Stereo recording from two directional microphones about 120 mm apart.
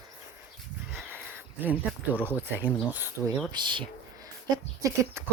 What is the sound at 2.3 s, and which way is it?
Speech, 15° right (ahead or behind).